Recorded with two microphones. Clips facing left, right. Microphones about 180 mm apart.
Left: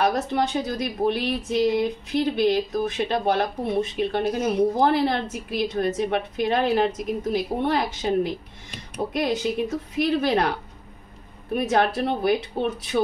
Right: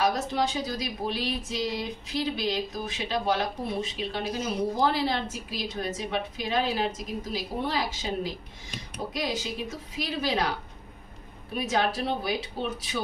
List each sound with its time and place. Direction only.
0.0 s a woman's voice: 60° left (ahead or behind)
11.5 s a woman's voice: 60° left (ahead or behind)